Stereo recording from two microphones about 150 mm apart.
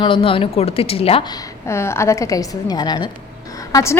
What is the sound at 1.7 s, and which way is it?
A woman's voice, 15° left (ahead or behind).